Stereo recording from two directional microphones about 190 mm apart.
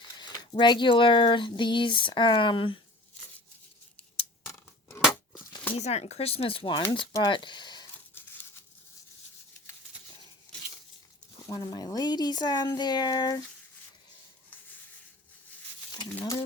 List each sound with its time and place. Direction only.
0.2 s speech: 25° left (ahead or behind)
4.4 s scissors: 10° left (ahead or behind)
5.7 s speech: 35° left (ahead or behind)
11.3 s speech: 20° left (ahead or behind)
15.9 s speech: 20° left (ahead or behind)